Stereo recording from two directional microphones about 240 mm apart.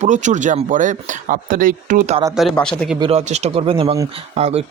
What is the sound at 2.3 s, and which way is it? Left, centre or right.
Speech, centre.